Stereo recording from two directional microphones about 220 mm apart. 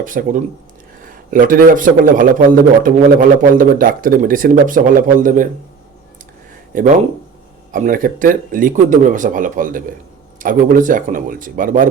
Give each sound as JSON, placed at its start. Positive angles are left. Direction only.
{"t": 0.0, "sound": "a man's voice", "side_deg": -40}
{"t": 6.7, "sound": "a man's voice", "side_deg": -40}